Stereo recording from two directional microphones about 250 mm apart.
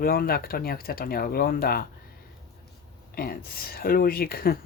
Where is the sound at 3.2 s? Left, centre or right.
Left.